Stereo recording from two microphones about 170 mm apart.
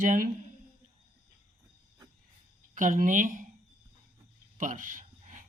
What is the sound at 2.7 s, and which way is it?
Speech, 50° right (ahead or behind).